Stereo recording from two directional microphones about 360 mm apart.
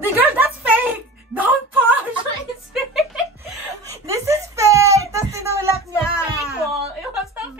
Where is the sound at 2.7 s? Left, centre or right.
Centre.